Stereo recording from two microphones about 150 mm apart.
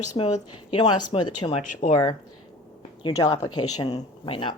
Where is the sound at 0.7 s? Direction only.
35° left (ahead or behind).